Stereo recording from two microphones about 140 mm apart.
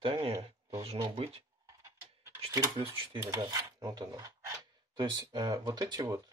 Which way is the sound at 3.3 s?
25° right (ahead or behind).